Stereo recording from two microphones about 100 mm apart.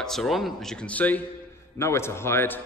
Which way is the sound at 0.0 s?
5° left (ahead or behind).